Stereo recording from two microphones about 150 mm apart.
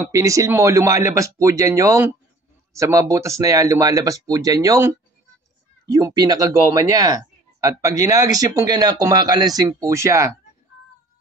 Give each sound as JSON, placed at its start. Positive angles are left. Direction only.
{"t": 0.1, "sound": "speech", "side_deg": -20}